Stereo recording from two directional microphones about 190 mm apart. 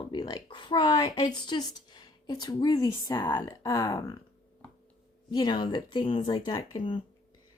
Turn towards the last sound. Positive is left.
turn(degrees=25)  # may be behind; listen again after turning